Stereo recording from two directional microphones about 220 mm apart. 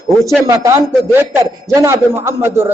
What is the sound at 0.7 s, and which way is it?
A man's voice, 10° right (ahead or behind).